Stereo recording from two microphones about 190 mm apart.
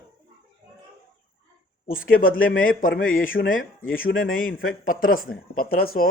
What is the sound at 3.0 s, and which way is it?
Speech, 90° left.